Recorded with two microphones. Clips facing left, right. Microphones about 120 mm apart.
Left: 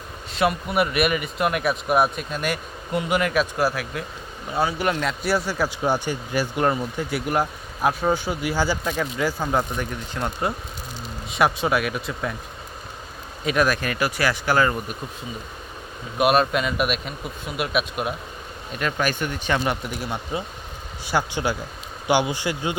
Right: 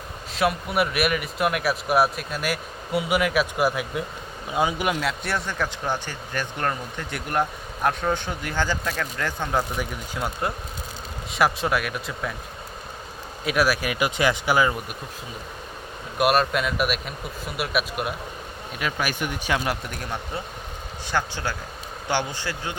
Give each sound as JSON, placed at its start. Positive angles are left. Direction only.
{"t": 0.3, "sound": "speech", "side_deg": 0}
{"t": 3.6, "sound": "speech", "side_deg": -20}
{"t": 13.4, "sound": "speech", "side_deg": -5}
{"t": 16.1, "sound": "speech", "side_deg": 0}
{"t": 20.0, "sound": "speech", "side_deg": 15}